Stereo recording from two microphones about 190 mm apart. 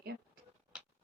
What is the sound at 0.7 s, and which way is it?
Rodents, 5° right (ahead or behind).